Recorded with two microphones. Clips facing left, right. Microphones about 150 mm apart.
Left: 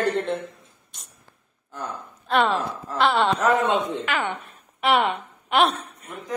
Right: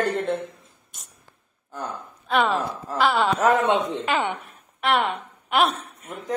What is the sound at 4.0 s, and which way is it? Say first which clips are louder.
Speech: right 2 dB; 30° right (ahead or behind).